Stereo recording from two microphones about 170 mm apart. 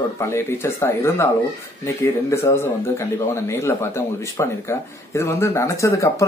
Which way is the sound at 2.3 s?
15° left (ahead or behind).